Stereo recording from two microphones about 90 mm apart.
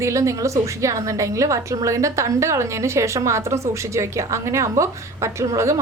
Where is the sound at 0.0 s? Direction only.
35° right (ahead or behind).